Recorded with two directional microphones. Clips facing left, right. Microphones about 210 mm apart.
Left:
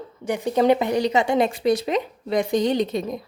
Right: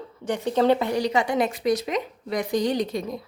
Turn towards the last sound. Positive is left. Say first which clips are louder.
# left 3 dB
turn(degrees=20)  # may be behind; listen again after turning